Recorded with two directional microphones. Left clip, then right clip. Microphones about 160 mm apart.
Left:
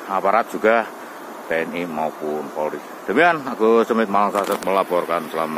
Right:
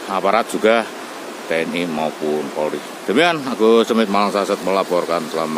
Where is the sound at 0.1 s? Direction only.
10° right (ahead or behind).